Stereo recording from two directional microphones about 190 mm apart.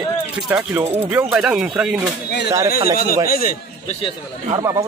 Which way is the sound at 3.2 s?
50° left (ahead or behind).